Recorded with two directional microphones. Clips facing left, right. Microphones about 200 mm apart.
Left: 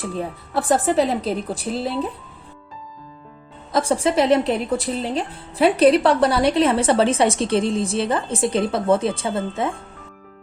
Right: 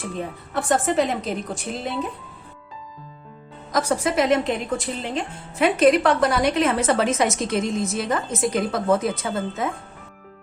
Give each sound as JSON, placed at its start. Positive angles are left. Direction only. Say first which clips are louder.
{"t": 0.0, "sound": "speech", "louder": "left 3 dB", "side_deg": 35}
{"t": 3.7, "sound": "speech", "louder": "left 3 dB", "side_deg": 30}